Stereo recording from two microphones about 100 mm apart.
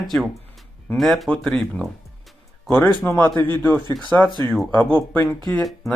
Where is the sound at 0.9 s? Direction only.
Centre (ahead or behind).